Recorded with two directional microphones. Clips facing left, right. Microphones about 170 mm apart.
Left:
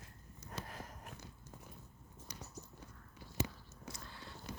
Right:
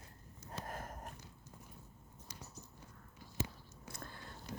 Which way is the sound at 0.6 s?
50° right (ahead or behind).